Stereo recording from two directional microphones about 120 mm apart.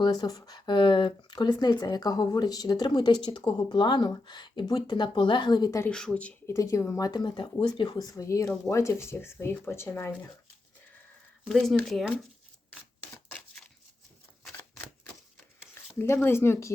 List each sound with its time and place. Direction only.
0.0 s speech: 35° left (ahead or behind)
5.9 s speech: 5° left (ahead or behind)
6.5 s speech: 25° left (ahead or behind)
11.4 s speech: centre (ahead or behind)
14.5 s camera: 15° left (ahead or behind)
16.1 s speech: 20° left (ahead or behind)